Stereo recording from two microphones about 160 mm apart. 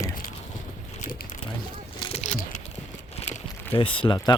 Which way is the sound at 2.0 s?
40° left (ahead or behind).